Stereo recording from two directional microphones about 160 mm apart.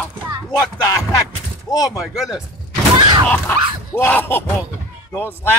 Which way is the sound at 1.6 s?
25° left (ahead or behind).